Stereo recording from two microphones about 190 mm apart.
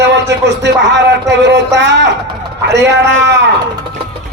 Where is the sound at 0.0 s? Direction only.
65° right (ahead or behind).